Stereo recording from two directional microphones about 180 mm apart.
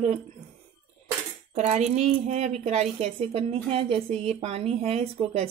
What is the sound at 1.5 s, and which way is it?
Speech, 40° right (ahead or behind).